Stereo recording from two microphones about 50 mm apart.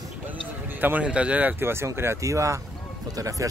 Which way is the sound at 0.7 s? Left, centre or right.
Right.